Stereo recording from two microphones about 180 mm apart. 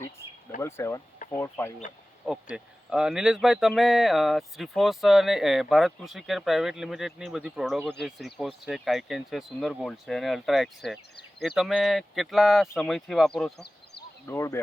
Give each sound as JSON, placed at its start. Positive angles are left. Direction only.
{"t": 0.6, "sound": "speech", "side_deg": 15}
{"t": 2.2, "sound": "speech", "side_deg": -5}
{"t": 14.3, "sound": "speech", "side_deg": 15}